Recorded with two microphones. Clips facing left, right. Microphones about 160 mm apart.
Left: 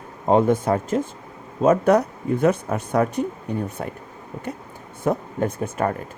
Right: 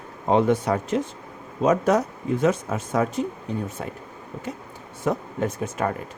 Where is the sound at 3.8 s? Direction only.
45° left (ahead or behind).